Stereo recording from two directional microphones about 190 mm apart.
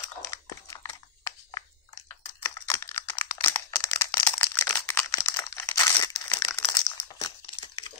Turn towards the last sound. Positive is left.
turn(degrees=20)  # may be behind; listen again after turning